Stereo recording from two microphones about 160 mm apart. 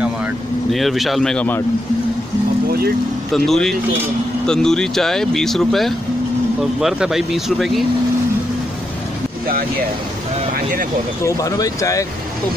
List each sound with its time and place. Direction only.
0.7 s speech: centre (ahead or behind)
3.3 s speech: centre (ahead or behind)
11.2 s speech: 20° left (ahead or behind)